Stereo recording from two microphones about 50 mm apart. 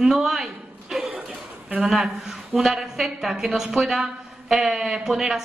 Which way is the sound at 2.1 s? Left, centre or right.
Centre.